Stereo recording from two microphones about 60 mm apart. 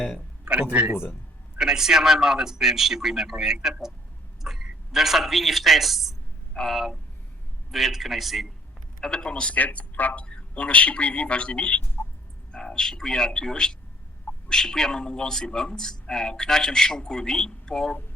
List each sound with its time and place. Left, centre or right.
0.4 s speech: right
1.5 s a man's voice: centre
9.0 s speech: centre
10.2 s speech: centre
12.0 s a sound: left
12.5 s a man's voice: centre